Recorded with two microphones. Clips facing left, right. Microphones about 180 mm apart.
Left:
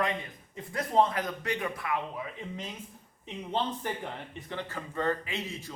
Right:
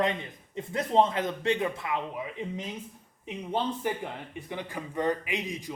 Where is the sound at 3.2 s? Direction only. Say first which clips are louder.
Right 2 dB; 10° right (ahead or behind).